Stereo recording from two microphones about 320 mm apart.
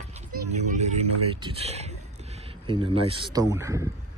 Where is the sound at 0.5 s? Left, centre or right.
Right.